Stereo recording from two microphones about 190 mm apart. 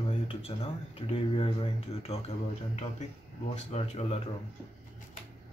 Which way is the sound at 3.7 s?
35° left (ahead or behind).